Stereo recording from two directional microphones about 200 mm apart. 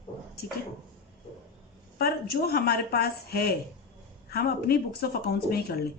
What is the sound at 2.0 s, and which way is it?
A woman's voice, 50° left (ahead or behind).